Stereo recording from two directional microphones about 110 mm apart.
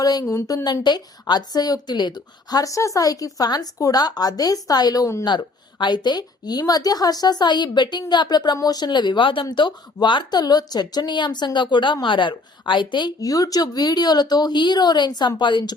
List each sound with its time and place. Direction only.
0.0 s a woman's voice: 35° left (ahead or behind)
5.2 s a woman's voice: 45° left (ahead or behind)